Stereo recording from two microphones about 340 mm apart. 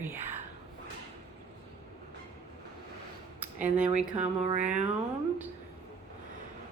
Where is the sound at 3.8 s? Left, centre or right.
Centre.